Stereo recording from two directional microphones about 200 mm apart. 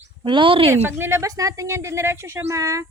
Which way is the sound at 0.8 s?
10° right (ahead or behind).